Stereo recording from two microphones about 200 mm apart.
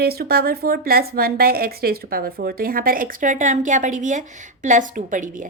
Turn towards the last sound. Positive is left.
turn(degrees=-40)  # may be behind; listen again after turning